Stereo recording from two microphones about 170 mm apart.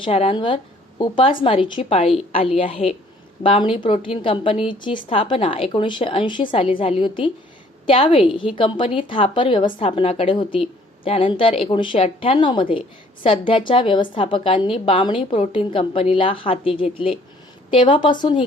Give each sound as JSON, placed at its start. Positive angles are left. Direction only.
{"t": 0.0, "sound": "a woman's voice", "side_deg": 35}